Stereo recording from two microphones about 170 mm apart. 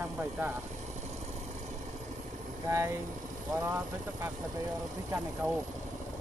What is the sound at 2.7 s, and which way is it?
Speech, 15° right (ahead or behind).